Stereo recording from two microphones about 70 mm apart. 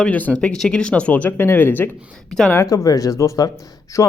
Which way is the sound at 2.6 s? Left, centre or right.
Left.